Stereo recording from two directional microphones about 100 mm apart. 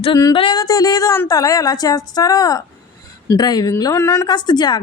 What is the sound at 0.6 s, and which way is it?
A woman's voice, 35° left (ahead or behind).